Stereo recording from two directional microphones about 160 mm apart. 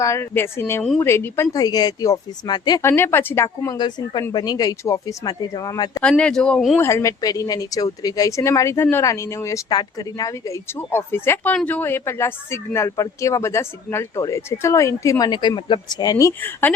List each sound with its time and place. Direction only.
0.0 s speech: 15° left (ahead or behind)
2.8 s speech: 15° left (ahead or behind)
6.0 s speech: 5° left (ahead or behind)
6.7 s speech: 15° left (ahead or behind)